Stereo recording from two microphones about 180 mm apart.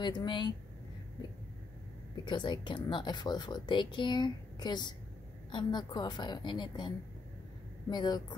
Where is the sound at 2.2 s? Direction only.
25° left (ahead or behind).